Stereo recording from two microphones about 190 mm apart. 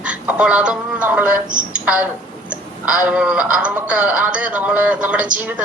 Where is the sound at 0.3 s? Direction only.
5° right (ahead or behind).